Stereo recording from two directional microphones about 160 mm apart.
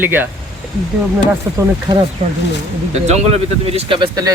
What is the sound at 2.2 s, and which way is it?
A man's voice, 40° right (ahead or behind).